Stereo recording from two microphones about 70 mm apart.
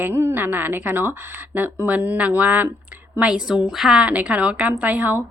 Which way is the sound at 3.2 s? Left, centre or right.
Centre.